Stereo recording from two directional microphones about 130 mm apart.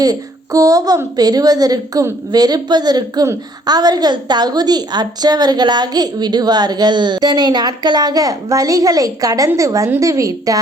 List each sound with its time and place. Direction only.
0.0 s a woman's voice: 30° right (ahead or behind)